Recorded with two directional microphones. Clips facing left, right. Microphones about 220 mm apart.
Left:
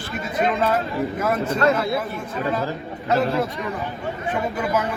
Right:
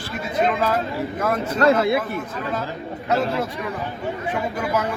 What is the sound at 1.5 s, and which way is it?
Speech, 30° right (ahead or behind).